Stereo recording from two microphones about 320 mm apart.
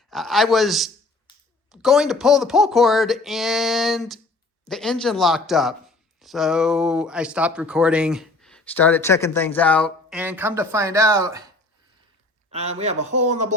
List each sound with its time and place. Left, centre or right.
0.1 s speech: centre
12.5 s a man's voice: centre